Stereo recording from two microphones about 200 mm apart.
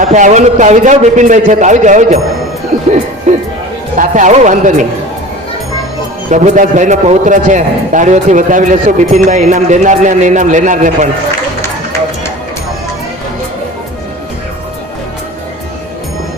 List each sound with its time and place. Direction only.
0.0 s a man's voice: 40° right (ahead or behind)
3.3 s a man's voice: 35° right (ahead or behind)
6.3 s a man's voice: 40° right (ahead or behind)